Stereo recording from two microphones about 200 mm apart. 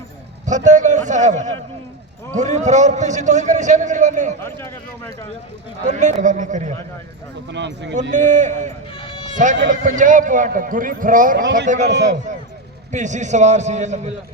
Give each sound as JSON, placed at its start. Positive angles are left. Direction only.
{"t": 0.4, "sound": "a man's voice", "side_deg": -35}
{"t": 4.4, "sound": "speech", "side_deg": 10}
{"t": 5.9, "sound": "a man's voice", "side_deg": -35}
{"t": 7.5, "sound": "speech", "side_deg": -60}
{"t": 8.1, "sound": "a man's voice", "side_deg": -35}
{"t": 9.0, "sound": "a sound", "side_deg": 25}
{"t": 9.6, "sound": "a man's voice", "side_deg": -40}